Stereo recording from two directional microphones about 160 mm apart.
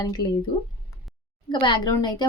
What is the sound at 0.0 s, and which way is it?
A woman's voice, 25° left (ahead or behind).